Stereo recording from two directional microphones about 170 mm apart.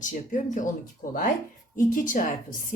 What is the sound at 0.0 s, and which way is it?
Speech, 50° left (ahead or behind).